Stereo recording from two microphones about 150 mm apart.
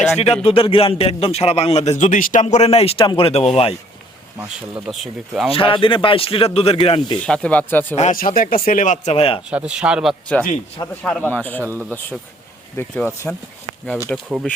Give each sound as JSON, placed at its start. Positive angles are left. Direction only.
{"t": 0.0, "sound": "a man's voice", "side_deg": 45}
{"t": 4.9, "sound": "speech", "side_deg": -5}
{"t": 5.5, "sound": "a man's voice", "side_deg": 35}
{"t": 7.3, "sound": "speech", "side_deg": 5}
{"t": 7.9, "sound": "speech", "side_deg": 60}
{"t": 9.5, "sound": "speech", "side_deg": -10}
{"t": 11.0, "sound": "speech", "side_deg": 10}
{"t": 11.6, "sound": "speech", "side_deg": -15}
{"t": 12.7, "sound": "speech", "side_deg": 15}